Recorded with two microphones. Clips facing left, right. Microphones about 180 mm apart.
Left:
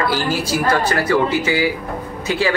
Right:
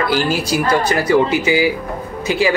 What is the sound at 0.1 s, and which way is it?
A man's voice, 15° right (ahead or behind).